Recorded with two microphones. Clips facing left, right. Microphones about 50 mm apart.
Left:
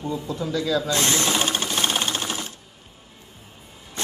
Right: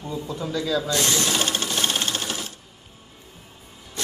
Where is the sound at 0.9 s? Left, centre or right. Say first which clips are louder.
Left 1 dB; left.